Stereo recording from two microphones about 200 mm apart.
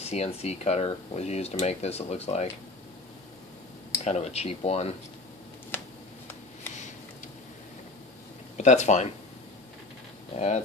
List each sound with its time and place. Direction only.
0.0 s speech: 30° left (ahead or behind)
4.0 s speech: 30° left (ahead or behind)
8.5 s speech: 35° left (ahead or behind)
10.3 s speech: 35° left (ahead or behind)